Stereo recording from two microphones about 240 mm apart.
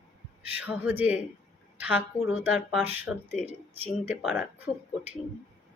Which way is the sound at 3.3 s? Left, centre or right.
Left.